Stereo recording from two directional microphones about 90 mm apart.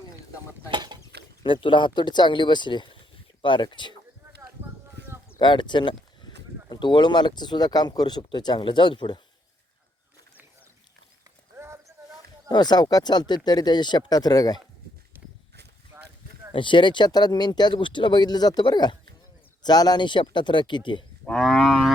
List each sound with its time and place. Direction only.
0.7 s a sound: 60° right (ahead or behind)
1.6 s speech: 65° left (ahead or behind)
5.4 s speech: 60° left (ahead or behind)
11.5 s clip-clop: 30° right (ahead or behind)
12.5 s speech: 50° left (ahead or behind)
15.1 s walk: 20° right (ahead or behind)
16.5 s speech: 65° left (ahead or behind)
21.2 s cattle: 5° left (ahead or behind)